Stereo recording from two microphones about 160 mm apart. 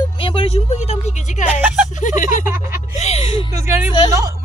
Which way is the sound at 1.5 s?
10° right (ahead or behind).